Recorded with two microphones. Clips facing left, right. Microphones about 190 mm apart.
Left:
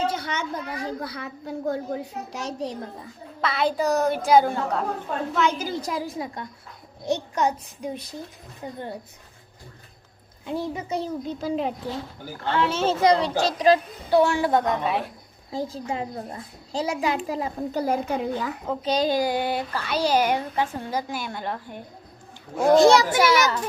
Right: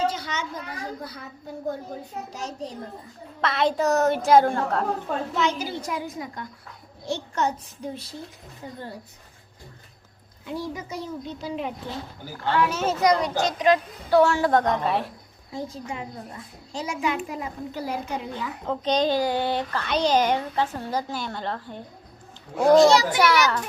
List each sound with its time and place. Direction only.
0.1 s a woman's voice: 55° left (ahead or behind)
3.4 s a woman's voice: centre (ahead or behind)
5.4 s a child's voice: 50° left (ahead or behind); by 6.4 s 30° left (ahead or behind)
7.0 s speech: 15° left (ahead or behind)
10.4 s a child's voice: 25° left (ahead or behind)
12.5 s a child's voice: 25° left (ahead or behind)
14.1 s a woman's voice: 15° left (ahead or behind)
15.5 s a child's voice: 35° left (ahead or behind)
17.8 s a woman's voice: 50° left (ahead or behind)
18.6 s speech: 5° left (ahead or behind)
22.5 s a woman's voice: 5° left (ahead or behind)
22.8 s a woman's voice: 55° left (ahead or behind)
23.2 s a woman's voice: centre (ahead or behind)